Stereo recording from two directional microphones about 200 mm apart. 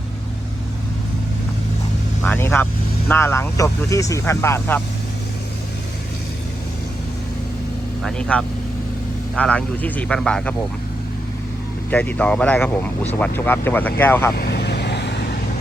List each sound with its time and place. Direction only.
2.2 s speech: 10° left (ahead or behind)
8.0 s speech: 5° left (ahead or behind)
11.9 s speech: 10° left (ahead or behind)
14.3 s vehicle: 55° left (ahead or behind)